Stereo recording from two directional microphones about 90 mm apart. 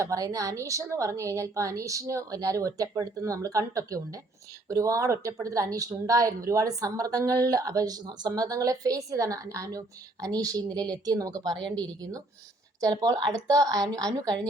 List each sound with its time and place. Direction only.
0.0 s a woman's voice: 40° right (ahead or behind)
11.5 s a woman's voice: 10° left (ahead or behind)
11.9 s a woman's voice: 40° right (ahead or behind)